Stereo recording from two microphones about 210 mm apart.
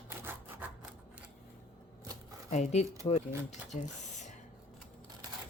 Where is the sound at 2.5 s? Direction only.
35° left (ahead or behind).